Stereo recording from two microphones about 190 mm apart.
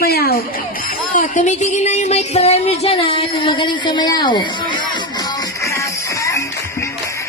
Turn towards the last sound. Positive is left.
turn(degrees=15)  # may be behind; listen again after turning